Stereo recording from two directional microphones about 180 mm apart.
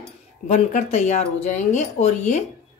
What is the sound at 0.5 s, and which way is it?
Speech, 40° left (ahead or behind).